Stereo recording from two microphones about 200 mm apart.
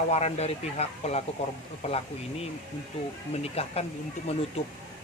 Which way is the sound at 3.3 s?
30° left (ahead or behind).